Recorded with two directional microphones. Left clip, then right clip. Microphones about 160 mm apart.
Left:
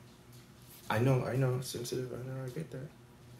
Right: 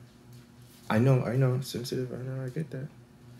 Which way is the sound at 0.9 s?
40° right (ahead or behind).